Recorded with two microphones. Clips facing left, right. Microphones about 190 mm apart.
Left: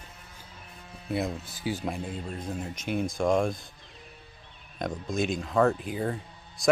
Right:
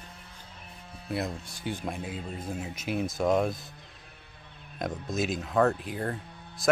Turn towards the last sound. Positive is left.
turn(degrees=0)  # may be behind; listen again after turning